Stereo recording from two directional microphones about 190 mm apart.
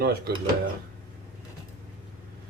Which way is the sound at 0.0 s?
55° right (ahead or behind).